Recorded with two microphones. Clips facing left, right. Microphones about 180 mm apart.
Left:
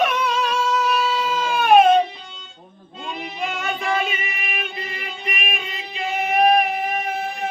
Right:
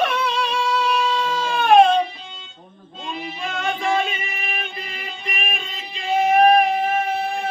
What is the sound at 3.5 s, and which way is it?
Music, 5° left (ahead or behind).